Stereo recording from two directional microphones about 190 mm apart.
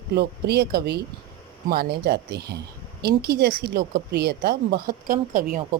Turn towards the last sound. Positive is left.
turn(degrees=-45)  # may be behind; listen again after turning